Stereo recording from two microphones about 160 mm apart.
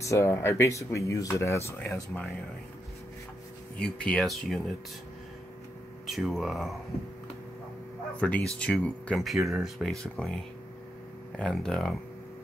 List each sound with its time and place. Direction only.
0.0 s speech: 20° left (ahead or behind)
1.9 s speech: centre (ahead or behind)
3.7 s speech: 5° left (ahead or behind)
6.0 s speech: centre (ahead or behind)
8.2 s speech: 10° left (ahead or behind)